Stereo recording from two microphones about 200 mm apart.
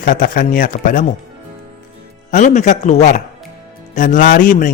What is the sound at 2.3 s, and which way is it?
Speech, 40° left (ahead or behind).